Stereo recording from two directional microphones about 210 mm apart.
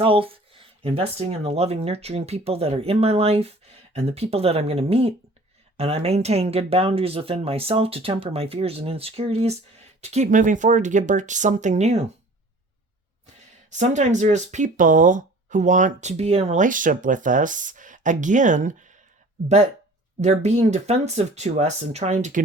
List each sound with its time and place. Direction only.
0.0 s speech: 25° right (ahead or behind)
13.7 s speech: 35° right (ahead or behind)
20.2 s speech: 35° right (ahead or behind)